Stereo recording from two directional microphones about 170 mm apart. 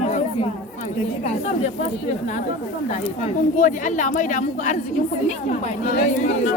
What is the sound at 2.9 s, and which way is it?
Speech, 40° left (ahead or behind).